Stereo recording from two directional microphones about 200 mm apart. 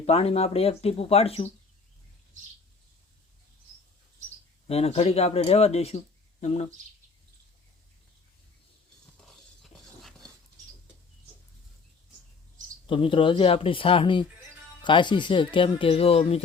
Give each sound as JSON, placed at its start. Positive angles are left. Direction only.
{"t": 0.0, "sound": "speech", "side_deg": 30}
{"t": 4.7, "sound": "speech", "side_deg": 30}
{"t": 12.9, "sound": "speech", "side_deg": 25}